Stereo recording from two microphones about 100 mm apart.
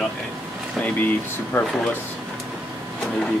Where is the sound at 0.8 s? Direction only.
20° left (ahead or behind).